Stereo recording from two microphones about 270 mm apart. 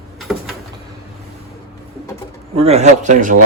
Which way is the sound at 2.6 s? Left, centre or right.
Right.